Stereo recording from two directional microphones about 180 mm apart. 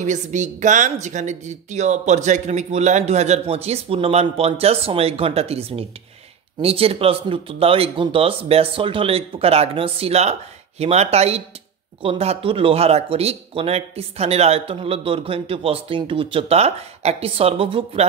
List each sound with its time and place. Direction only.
0.0 s speech: 40° right (ahead or behind)